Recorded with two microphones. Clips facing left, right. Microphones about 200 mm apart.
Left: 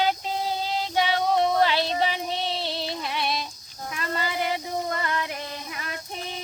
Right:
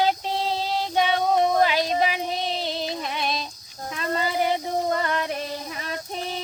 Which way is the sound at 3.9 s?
30° right (ahead or behind).